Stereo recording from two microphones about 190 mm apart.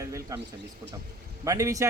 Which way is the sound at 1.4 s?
15° right (ahead or behind).